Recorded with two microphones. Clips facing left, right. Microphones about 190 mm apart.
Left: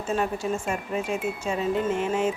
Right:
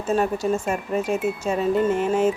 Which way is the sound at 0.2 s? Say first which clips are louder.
Right 5 dB; 40° right (ahead or behind).